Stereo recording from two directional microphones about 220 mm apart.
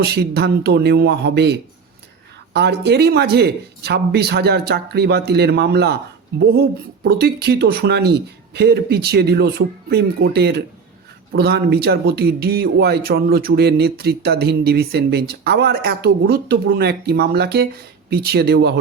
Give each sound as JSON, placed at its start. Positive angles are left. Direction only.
{"t": 0.0, "sound": "speech", "side_deg": -45}